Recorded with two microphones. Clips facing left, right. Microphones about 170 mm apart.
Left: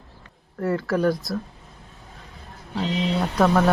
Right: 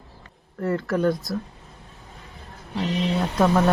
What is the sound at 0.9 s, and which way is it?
Speech, 20° right (ahead or behind).